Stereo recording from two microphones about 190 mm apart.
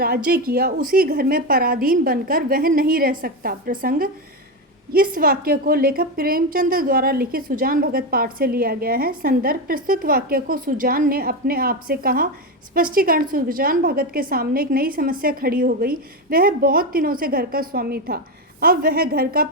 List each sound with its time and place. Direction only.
0.0 s a woman's voice: 55° right (ahead or behind)